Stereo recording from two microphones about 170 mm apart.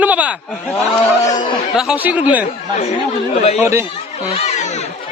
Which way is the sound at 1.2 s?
45° left (ahead or behind).